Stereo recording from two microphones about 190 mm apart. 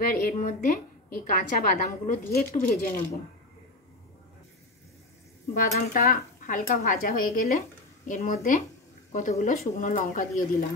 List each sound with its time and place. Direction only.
0.0 s speech: 50° left (ahead or behind)
5.5 s speech: 50° left (ahead or behind)